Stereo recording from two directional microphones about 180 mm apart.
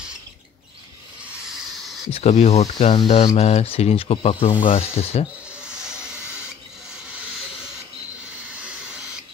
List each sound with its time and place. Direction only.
1.7 s a sound: centre (ahead or behind)
2.0 s speech: 35° left (ahead or behind)
5.5 s hiss: 5° right (ahead or behind)